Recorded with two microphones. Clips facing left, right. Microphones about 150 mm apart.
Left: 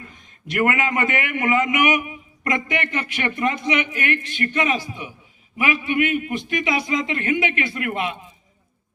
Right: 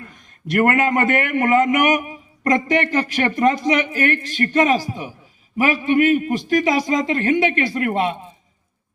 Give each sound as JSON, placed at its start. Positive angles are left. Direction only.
{"t": 0.6, "sound": "a man's voice", "side_deg": -45}